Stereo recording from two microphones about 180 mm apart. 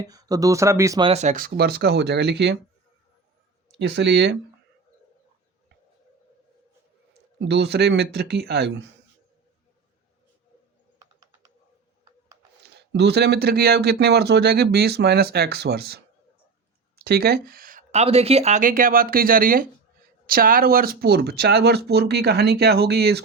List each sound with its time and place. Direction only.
0.0 s speech: 20° right (ahead or behind)
1.0 s speech: 40° right (ahead or behind); by 2.6 s 65° right (ahead or behind)
3.8 s speech: 70° right (ahead or behind)
7.3 s speech: 70° right (ahead or behind)
12.6 s speech: 70° right (ahead or behind)